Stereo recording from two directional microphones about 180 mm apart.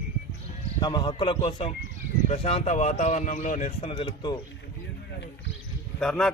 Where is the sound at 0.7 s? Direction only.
25° left (ahead or behind).